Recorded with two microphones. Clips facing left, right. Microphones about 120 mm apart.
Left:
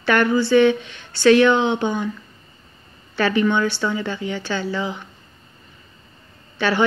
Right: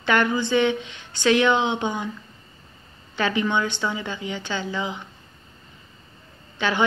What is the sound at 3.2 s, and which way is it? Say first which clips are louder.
Speech: left 4 dB; 20° right (ahead or behind).